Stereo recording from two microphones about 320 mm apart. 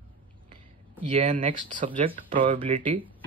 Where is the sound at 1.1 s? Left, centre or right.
Centre.